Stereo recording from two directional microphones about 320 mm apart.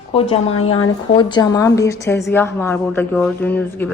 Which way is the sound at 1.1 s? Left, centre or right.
Centre.